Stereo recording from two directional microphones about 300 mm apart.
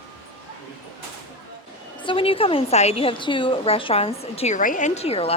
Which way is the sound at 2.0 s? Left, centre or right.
Centre.